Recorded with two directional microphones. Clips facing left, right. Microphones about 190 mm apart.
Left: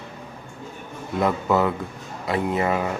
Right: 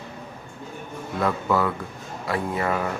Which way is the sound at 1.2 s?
20° left (ahead or behind).